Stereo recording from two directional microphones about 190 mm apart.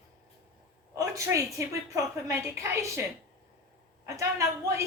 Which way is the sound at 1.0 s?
15° right (ahead or behind).